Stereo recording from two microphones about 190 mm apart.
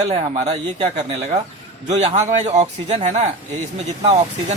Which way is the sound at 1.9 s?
35° right (ahead or behind).